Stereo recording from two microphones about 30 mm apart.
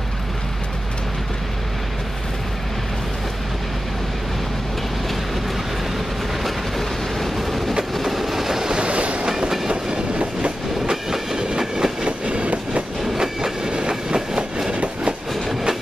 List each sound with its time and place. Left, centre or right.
6.8 s train: centre
8.8 s train: right
10.9 s train: right
12.3 s train: right
13.2 s train: right
14.7 s train: right